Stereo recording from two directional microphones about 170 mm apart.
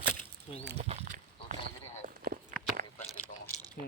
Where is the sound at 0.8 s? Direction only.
40° right (ahead or behind).